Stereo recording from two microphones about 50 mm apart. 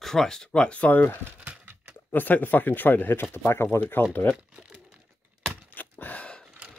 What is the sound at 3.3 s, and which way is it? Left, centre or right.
Speech, left.